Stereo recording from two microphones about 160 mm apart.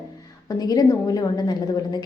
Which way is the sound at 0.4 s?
25° left (ahead or behind).